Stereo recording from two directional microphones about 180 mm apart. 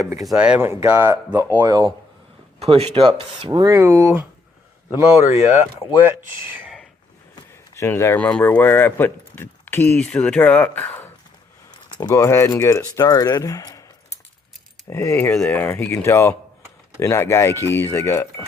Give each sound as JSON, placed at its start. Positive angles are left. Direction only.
{"t": 0.0, "sound": "speech", "side_deg": -20}
{"t": 0.3, "sound": "speech", "side_deg": -5}
{"t": 2.6, "sound": "speech", "side_deg": -35}
{"t": 3.7, "sound": "speech", "side_deg": -15}
{"t": 5.3, "sound": "speech", "side_deg": 40}
{"t": 6.6, "sound": "a sound", "side_deg": -5}
{"t": 7.8, "sound": "speech", "side_deg": 15}
{"t": 14.8, "sound": "speech", "side_deg": 15}